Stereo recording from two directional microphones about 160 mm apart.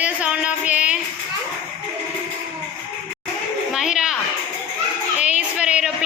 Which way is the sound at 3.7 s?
5° right (ahead or behind).